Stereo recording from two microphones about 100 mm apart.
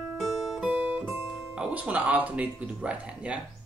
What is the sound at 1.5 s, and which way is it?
Speech, 15° right (ahead or behind).